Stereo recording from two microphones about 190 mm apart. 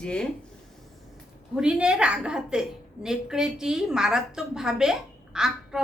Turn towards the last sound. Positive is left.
turn(degrees=-5)  # may be behind; listen again after turning